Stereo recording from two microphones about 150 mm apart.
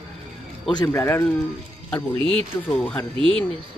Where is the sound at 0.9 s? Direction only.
15° left (ahead or behind).